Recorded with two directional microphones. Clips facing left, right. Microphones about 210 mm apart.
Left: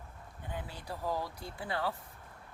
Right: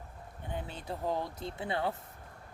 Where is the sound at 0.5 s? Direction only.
20° right (ahead or behind).